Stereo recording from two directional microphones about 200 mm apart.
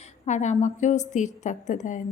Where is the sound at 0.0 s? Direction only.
35° left (ahead or behind).